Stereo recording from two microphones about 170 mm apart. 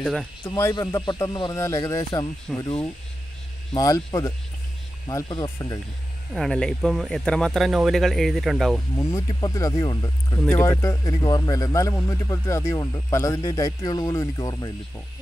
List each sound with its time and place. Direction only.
0.0 s speech: centre (ahead or behind)
0.6 s a man's voice: 15° left (ahead or behind)
2.5 s speech: centre (ahead or behind)
3.7 s a man's voice: 20° left (ahead or behind)
6.3 s speech: 5° left (ahead or behind)
8.9 s a man's voice: 20° left (ahead or behind)